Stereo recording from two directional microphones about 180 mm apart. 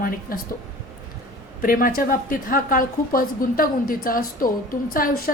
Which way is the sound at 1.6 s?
50° left (ahead or behind).